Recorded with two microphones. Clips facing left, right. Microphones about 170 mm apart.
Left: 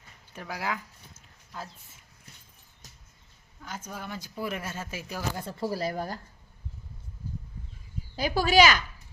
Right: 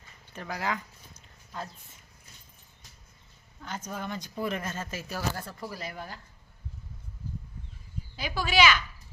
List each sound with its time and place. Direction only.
0.3 s speech: 10° left (ahead or behind)
3.6 s speech: 5° left (ahead or behind); by 6.1 s 40° left (ahead or behind)
8.1 s speech: 40° left (ahead or behind)